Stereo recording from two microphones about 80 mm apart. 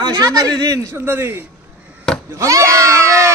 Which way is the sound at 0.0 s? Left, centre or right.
Right.